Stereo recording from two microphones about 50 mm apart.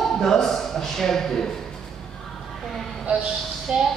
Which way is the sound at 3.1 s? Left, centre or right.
Right.